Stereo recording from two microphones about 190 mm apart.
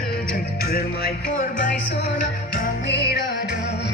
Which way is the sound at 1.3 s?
45° left (ahead or behind).